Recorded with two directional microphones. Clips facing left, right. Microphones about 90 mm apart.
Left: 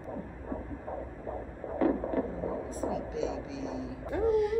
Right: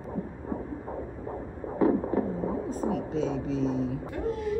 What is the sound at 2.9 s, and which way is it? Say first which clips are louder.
Speech: right 5 dB; 40° right (ahead or behind).